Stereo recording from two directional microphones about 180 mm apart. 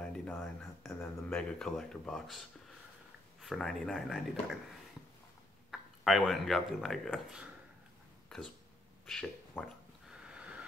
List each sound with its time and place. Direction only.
0.0 s speech: 5° left (ahead or behind)
5.7 s speech: centre (ahead or behind)
9.0 s speech: 5° left (ahead or behind)